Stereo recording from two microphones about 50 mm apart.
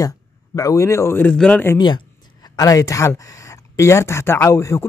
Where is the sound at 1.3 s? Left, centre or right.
Left.